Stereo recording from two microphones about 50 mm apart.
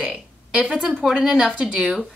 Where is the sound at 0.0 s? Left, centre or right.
Right.